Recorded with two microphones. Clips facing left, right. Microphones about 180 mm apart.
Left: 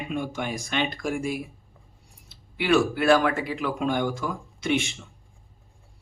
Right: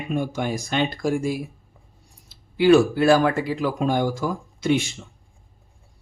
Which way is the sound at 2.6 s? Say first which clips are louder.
Right 7 dB; 35° right (ahead or behind).